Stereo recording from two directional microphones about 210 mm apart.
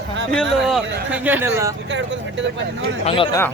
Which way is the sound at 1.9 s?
60° right (ahead or behind).